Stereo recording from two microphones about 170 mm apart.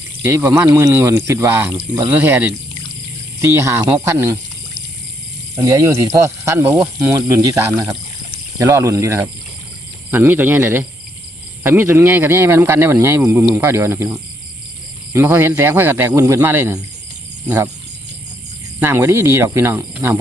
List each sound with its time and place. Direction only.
0.2 s speech: 10° right (ahead or behind)
5.5 s speech: 20° right (ahead or behind)
15.1 s speech: 15° right (ahead or behind)
18.8 s speech: 15° right (ahead or behind)